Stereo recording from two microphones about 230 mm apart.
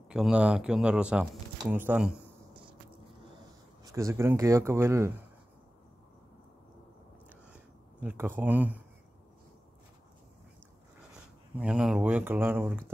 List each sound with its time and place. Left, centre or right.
0.1 s speech: centre
3.8 s speech: centre
7.5 s speech: centre
11.6 s speech: centre